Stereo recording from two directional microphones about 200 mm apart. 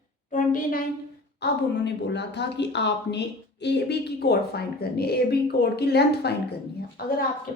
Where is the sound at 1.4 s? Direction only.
55° left (ahead or behind).